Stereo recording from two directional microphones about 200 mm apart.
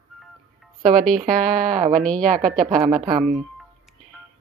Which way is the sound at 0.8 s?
40° right (ahead or behind).